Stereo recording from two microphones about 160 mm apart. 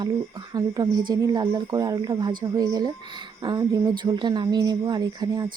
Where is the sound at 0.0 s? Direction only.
25° right (ahead or behind).